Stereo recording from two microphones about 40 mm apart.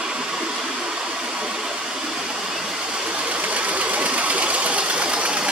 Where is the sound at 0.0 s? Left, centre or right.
Centre.